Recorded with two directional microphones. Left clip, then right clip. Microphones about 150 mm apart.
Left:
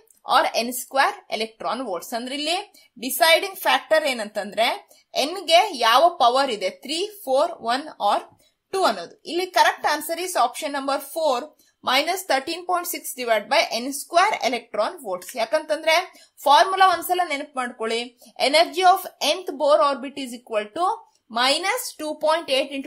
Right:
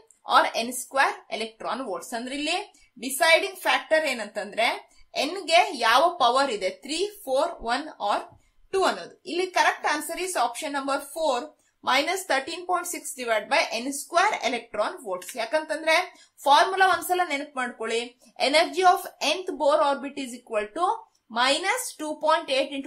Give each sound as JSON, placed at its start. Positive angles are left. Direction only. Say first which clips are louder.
{"t": 0.2, "sound": "a woman's voice", "louder": "left 2 dB", "side_deg": 35}